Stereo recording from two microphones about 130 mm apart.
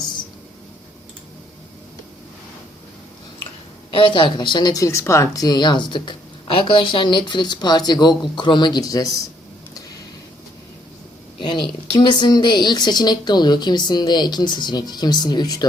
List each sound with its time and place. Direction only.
3.9 s speech: 40° left (ahead or behind)
11.3 s speech: 40° left (ahead or behind)